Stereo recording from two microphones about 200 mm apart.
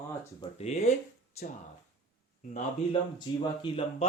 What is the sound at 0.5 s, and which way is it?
Speech, 30° left (ahead or behind).